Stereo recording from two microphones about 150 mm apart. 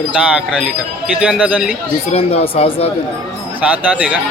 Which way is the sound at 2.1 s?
45° left (ahead or behind).